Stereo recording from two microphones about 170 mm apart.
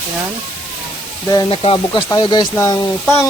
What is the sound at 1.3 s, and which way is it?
Speech, 25° left (ahead or behind).